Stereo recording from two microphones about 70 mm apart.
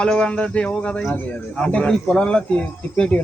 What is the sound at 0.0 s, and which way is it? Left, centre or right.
Speech, centre.